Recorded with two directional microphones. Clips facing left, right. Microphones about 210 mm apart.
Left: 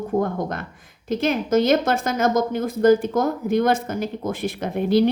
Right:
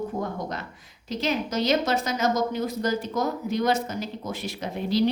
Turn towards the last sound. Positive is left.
turn(degrees=55)  # may be behind; listen again after turning